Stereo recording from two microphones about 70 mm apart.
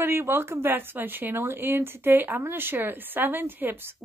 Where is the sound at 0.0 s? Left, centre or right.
Right.